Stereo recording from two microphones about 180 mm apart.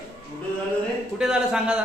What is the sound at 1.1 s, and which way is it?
Speech, 5° right (ahead or behind).